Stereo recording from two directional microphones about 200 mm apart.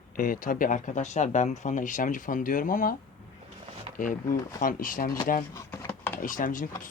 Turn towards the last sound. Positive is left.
turn(degrees=40)  # may be behind; listen again after turning